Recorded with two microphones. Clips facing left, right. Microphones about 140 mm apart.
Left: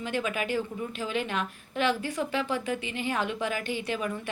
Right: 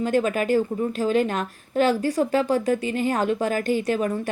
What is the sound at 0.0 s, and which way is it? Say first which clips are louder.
A woman's voice: right 9 dB; 45° right (ahead or behind).